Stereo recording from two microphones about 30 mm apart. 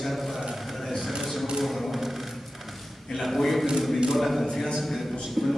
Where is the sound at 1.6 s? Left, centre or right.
Centre.